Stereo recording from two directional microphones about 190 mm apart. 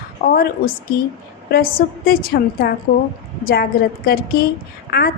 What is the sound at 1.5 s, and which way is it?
A woman's voice, 50° left (ahead or behind).